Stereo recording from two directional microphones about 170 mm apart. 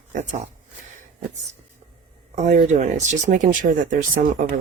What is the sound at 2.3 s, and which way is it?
Speech, 45° right (ahead or behind).